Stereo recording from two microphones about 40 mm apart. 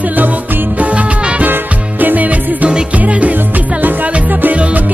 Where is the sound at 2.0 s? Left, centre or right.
Right.